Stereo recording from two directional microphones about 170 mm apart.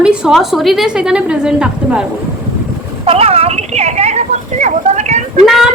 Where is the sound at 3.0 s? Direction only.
35° right (ahead or behind).